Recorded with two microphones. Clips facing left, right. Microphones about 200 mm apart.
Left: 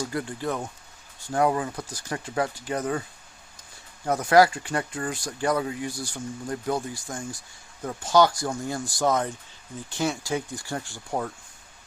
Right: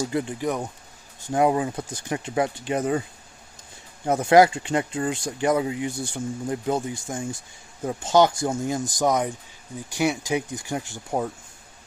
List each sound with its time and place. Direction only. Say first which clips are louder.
0.0 s speech: right 4 dB; 20° right (ahead or behind)
4.0 s speech: right 3 dB; 25° right (ahead or behind)